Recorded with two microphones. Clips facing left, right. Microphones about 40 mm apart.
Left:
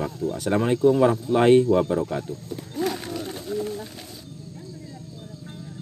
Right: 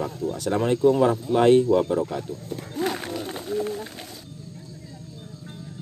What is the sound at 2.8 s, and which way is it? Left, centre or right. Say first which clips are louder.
Run: even; right.